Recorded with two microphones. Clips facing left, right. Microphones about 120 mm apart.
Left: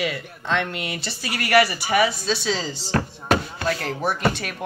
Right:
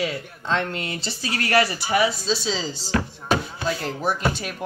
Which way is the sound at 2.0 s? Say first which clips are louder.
Left 1 dB; 65° left (ahead or behind).